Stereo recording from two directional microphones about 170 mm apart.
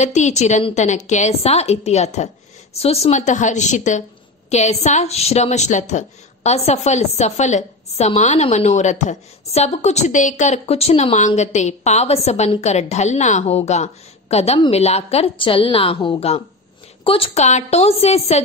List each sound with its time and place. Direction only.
0.0 s a woman's voice: 40° left (ahead or behind)